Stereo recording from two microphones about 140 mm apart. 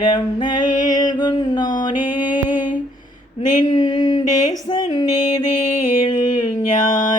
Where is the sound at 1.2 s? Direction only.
35° left (ahead or behind).